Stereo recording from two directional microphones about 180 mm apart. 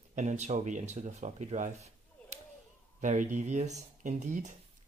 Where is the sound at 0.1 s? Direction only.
40° right (ahead or behind).